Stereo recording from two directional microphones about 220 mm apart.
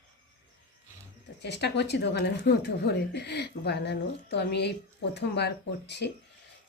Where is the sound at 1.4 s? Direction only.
50° left (ahead or behind).